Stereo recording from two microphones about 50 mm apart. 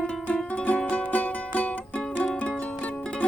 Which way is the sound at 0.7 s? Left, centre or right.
Left.